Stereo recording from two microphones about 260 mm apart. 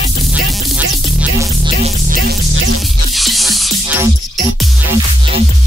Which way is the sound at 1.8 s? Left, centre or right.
Right.